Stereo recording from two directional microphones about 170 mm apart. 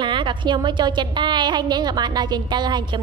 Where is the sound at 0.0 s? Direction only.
25° right (ahead or behind).